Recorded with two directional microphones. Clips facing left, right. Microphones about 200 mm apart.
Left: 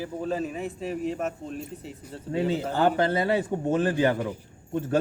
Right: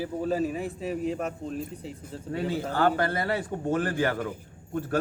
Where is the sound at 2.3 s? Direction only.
20° left (ahead or behind).